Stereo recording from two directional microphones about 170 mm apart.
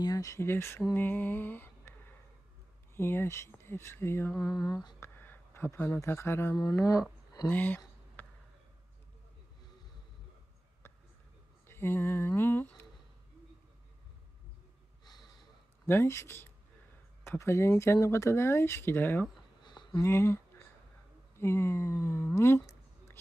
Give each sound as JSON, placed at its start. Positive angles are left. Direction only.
{"t": 0.0, "sound": "speech", "side_deg": 20}
{"t": 3.0, "sound": "speech", "side_deg": 15}
{"t": 11.6, "sound": "speech", "side_deg": 15}
{"t": 15.0, "sound": "snort", "side_deg": 25}
{"t": 15.9, "sound": "speech", "side_deg": 15}
{"t": 19.6, "sound": "a sound", "side_deg": 25}
{"t": 20.0, "sound": "speech", "side_deg": 15}